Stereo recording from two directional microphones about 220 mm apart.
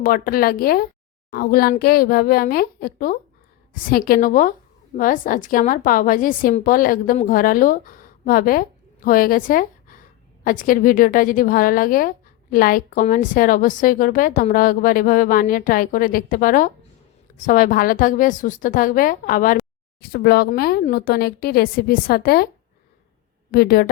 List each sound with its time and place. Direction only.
0.0 s a woman's voice: 40° left (ahead or behind)
23.5 s speech: 45° left (ahead or behind)